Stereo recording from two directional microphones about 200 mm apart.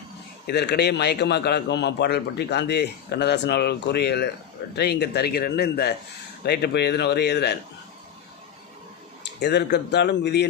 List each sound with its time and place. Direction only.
0.4 s a man's voice: 55° left (ahead or behind)
9.4 s a man's voice: 55° left (ahead or behind)